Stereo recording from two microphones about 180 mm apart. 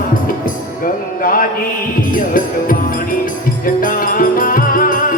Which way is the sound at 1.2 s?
50° left (ahead or behind).